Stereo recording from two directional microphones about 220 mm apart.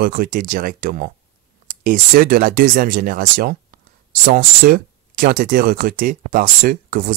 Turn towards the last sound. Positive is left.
turn(degrees=-40)  # may be behind; listen again after turning